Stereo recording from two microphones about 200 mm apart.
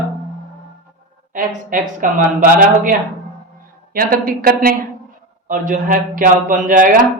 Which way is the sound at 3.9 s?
45° right (ahead or behind).